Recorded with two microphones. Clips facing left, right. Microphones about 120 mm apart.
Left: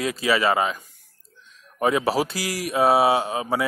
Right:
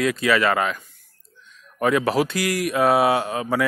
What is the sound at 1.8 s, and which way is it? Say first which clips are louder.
Speech: right 1 dB; 25° left (ahead or behind).